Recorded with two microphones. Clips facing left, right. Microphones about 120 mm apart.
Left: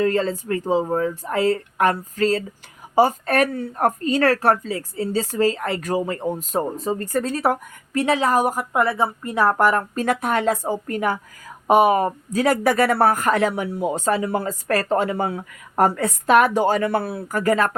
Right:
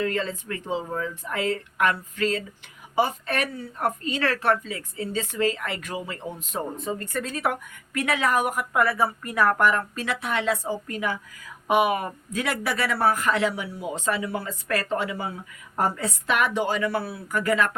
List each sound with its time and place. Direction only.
0.0 s speech: 35° left (ahead or behind)